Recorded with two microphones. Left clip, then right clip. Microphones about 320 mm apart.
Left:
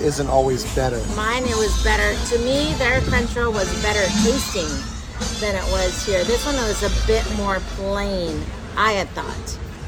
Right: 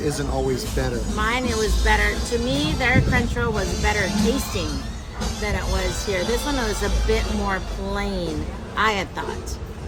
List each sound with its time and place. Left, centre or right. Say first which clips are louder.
0.0 s speech: left 7 dB; centre
1.2 s speech: left 2 dB; centre